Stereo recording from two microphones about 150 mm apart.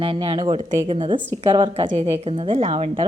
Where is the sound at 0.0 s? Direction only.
35° right (ahead or behind).